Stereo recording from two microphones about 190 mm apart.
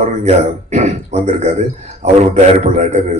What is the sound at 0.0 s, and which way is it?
Speech, 40° right (ahead or behind).